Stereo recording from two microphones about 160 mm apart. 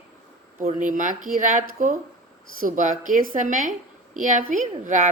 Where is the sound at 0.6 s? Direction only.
55° right (ahead or behind).